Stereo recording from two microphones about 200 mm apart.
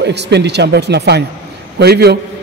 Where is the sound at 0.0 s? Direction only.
60° right (ahead or behind).